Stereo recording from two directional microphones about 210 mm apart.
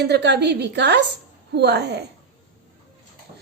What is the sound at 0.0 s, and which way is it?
A woman's voice, 55° right (ahead or behind).